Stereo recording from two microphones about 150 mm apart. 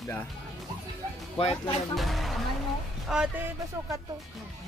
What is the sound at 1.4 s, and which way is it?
Speech, 40° left (ahead or behind).